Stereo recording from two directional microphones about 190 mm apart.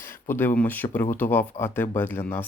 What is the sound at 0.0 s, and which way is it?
Speech, 10° left (ahead or behind).